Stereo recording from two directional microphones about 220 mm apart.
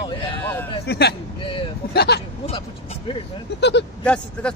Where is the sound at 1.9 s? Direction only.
45° left (ahead or behind).